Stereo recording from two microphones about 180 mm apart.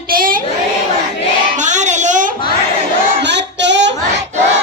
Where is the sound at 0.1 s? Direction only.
50° right (ahead or behind).